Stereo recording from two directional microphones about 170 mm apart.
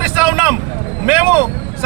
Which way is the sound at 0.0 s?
10° right (ahead or behind).